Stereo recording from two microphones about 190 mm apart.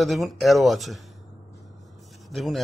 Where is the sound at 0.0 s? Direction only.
Centre (ahead or behind).